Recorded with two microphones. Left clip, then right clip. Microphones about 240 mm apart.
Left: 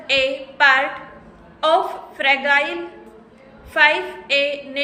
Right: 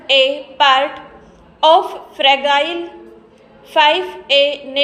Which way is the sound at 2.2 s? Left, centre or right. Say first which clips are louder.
Right 4 dB; centre.